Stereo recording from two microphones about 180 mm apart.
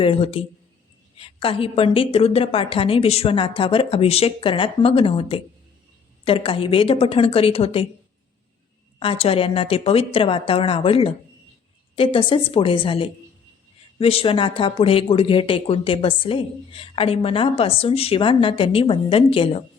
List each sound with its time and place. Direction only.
0.0 s speech: 30° left (ahead or behind)
9.0 s a woman's voice: 35° left (ahead or behind)